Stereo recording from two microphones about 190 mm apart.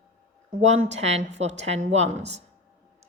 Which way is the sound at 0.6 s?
35° right (ahead or behind).